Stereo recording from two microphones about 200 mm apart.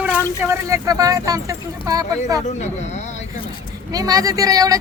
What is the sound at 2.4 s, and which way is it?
Speech, 35° left (ahead or behind).